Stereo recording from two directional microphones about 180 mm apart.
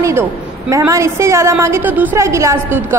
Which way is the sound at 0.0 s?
15° right (ahead or behind).